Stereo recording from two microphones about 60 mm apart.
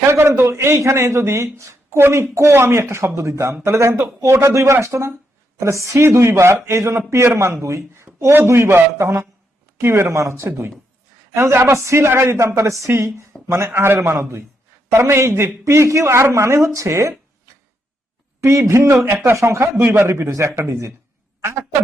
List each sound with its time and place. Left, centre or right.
0.1 s a man's voice: right
18.3 s a man's voice: right
19.0 s speech: right
19.4 s speech: right
19.9 s a man's voice: right